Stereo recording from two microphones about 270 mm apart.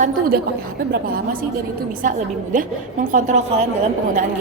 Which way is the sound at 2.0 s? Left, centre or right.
Right.